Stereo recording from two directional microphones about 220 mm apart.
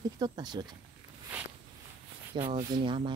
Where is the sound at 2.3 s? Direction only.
20° right (ahead or behind).